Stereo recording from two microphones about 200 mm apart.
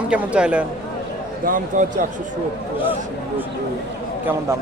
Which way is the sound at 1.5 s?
40° right (ahead or behind).